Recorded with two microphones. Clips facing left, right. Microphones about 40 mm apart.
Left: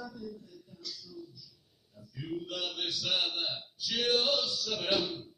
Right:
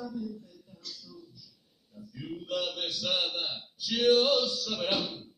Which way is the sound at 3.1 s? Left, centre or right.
Centre.